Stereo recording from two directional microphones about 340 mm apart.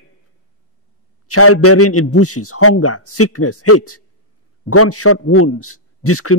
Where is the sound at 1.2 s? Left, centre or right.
Left.